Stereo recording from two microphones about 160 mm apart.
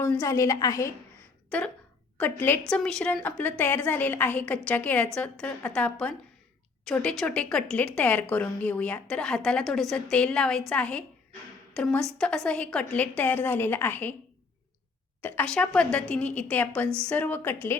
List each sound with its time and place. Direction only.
0.0 s a woman's voice: 15° left (ahead or behind)
1.5 s a woman's voice: 5° left (ahead or behind)
15.2 s a woman's voice: 10° left (ahead or behind)